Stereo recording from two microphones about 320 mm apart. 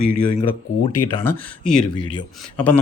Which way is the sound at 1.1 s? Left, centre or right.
Centre.